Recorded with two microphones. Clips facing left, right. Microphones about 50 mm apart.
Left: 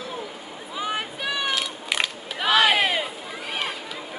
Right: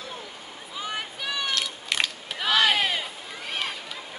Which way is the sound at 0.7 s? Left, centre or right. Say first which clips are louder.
Left 4 dB; centre.